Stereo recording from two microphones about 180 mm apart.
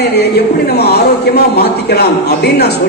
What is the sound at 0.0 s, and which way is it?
A man's voice, 65° left (ahead or behind).